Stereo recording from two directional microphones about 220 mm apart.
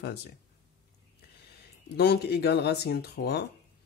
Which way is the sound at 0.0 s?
45° left (ahead or behind).